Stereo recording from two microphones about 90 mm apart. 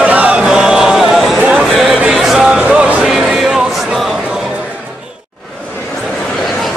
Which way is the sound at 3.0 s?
5° right (ahead or behind).